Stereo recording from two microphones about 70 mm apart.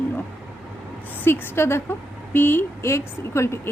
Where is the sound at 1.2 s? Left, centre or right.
Left.